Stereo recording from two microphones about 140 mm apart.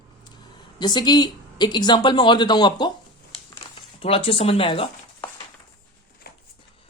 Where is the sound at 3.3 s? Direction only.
45° left (ahead or behind).